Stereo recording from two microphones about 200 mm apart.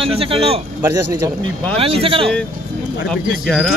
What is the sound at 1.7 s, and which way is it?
Speech, 30° right (ahead or behind).